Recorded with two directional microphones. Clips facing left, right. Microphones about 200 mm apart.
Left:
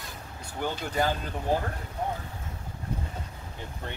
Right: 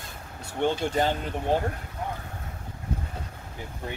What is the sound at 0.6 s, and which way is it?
Speech, 25° right (ahead or behind).